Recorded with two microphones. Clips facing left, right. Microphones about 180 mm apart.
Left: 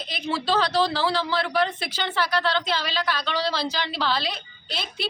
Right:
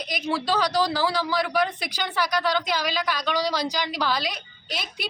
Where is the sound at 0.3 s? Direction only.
15° right (ahead or behind).